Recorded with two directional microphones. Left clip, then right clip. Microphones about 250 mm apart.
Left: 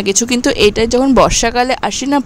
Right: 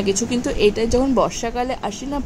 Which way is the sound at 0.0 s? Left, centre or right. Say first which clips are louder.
Left 7 dB; left.